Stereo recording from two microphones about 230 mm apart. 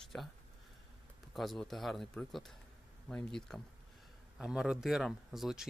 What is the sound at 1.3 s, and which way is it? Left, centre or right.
Speech, centre.